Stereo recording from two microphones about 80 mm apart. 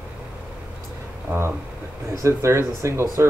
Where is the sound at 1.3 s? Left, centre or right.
Right.